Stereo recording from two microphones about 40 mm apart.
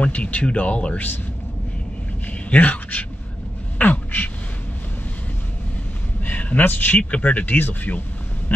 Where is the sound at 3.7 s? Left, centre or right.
Left.